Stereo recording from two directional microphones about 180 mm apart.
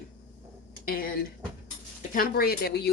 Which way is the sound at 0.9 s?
55° left (ahead or behind).